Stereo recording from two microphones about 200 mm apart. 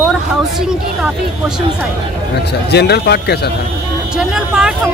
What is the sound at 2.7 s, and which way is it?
Speech, 55° left (ahead or behind).